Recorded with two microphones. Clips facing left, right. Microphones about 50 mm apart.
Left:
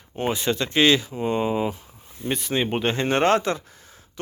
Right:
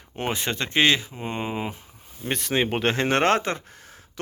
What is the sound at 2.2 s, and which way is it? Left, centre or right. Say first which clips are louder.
Speech: even; right.